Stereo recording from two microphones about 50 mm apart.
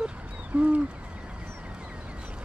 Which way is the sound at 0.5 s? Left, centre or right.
Right.